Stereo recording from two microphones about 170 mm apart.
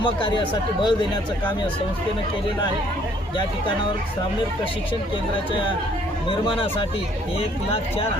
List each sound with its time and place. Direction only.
0.0 s speech: 30° left (ahead or behind)
6.2 s speech: 30° left (ahead or behind)